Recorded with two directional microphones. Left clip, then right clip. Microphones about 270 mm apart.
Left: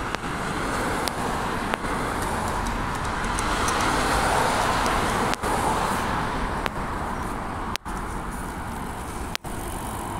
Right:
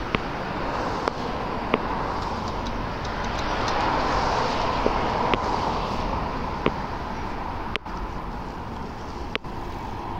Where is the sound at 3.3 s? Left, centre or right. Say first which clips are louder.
Left 1 dB; left.